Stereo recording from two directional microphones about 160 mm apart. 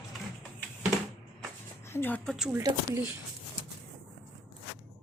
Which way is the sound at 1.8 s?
15° left (ahead or behind).